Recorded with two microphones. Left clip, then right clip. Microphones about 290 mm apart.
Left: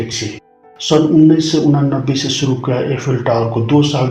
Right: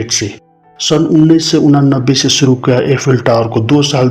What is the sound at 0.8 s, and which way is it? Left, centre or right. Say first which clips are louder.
Speech: right 1 dB; right.